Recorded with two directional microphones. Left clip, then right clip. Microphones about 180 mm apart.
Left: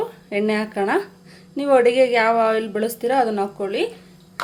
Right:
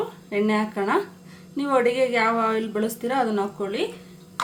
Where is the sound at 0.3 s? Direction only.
40° left (ahead or behind).